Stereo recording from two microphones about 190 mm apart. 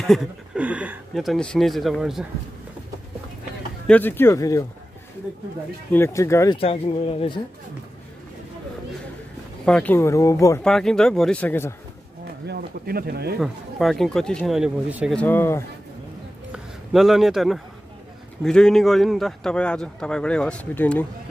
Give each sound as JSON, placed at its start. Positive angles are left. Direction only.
{"t": 0.0, "sound": "a man's voice", "side_deg": 0}
{"t": 3.8, "sound": "speech", "side_deg": 10}
{"t": 5.9, "sound": "speech", "side_deg": 10}
{"t": 6.6, "sound": "speech", "side_deg": 30}
{"t": 9.7, "sound": "speech", "side_deg": 5}
{"t": 10.6, "sound": "a man's voice", "side_deg": 5}
{"t": 12.4, "sound": "speech", "side_deg": -55}
{"t": 13.4, "sound": "a man's voice", "side_deg": 0}
{"t": 15.1, "sound": "speech", "side_deg": 10}
{"t": 16.5, "sound": "a man's voice", "side_deg": 0}